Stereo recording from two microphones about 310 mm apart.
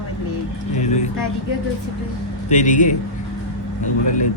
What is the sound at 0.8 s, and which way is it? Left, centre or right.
Vehicle, left.